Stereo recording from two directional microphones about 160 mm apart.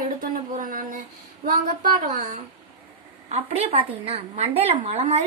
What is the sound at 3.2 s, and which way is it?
A woman's voice, 40° right (ahead or behind).